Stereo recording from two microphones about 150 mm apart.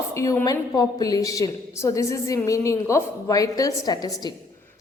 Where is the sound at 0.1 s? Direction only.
20° left (ahead or behind).